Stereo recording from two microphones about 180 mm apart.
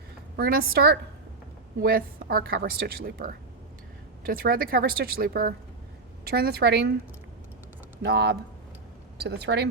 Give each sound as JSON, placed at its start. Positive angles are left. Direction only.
{"t": 0.3, "sound": "a woman's voice", "side_deg": -55}
{"t": 8.0, "sound": "a woman's voice", "side_deg": -65}